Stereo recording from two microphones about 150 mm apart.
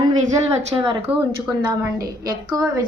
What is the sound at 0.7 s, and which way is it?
Speech, 35° right (ahead or behind).